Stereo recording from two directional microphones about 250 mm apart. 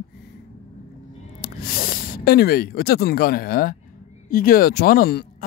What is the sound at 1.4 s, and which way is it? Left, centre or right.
Speech, left.